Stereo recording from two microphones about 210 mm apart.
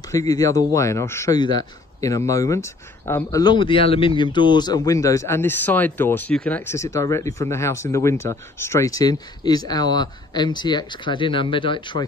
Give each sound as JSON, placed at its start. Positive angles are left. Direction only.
{"t": 0.1, "sound": "speech", "side_deg": 15}